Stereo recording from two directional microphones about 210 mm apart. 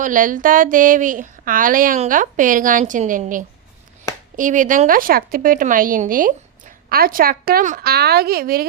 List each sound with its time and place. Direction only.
0.0 s speech: 40° right (ahead or behind)